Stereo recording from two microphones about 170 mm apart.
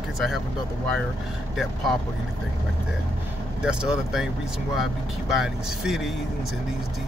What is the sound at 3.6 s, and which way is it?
Speech, 5° right (ahead or behind).